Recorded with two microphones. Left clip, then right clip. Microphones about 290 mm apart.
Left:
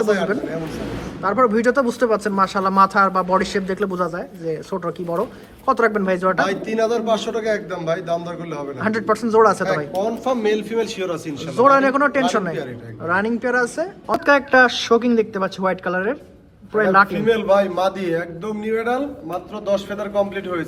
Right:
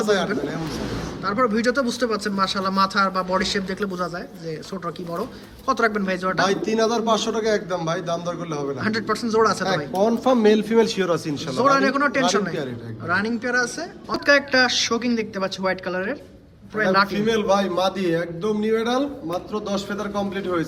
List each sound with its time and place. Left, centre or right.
1.2 s speech: centre
6.4 s a man's voice: centre
8.8 s speech: centre
10.0 s a man's voice: right
11.6 s a man's voice: centre